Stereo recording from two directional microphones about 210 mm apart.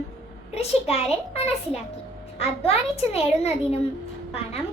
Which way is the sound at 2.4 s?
30° left (ahead or behind).